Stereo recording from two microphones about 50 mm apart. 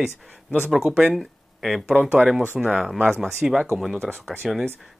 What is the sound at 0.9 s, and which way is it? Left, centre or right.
Speech, right.